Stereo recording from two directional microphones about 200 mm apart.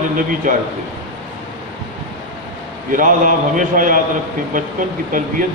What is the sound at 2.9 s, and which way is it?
A man's voice, 40° right (ahead or behind).